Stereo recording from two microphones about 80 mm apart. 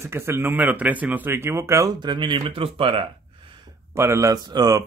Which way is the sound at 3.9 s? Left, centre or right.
Right.